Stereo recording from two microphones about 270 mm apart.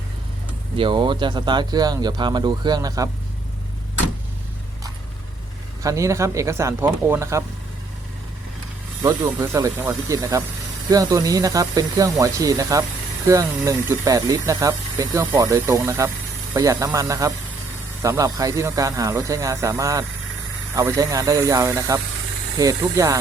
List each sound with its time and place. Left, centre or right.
0.8 s speech: centre
5.8 s speech: centre
9.0 s speech: centre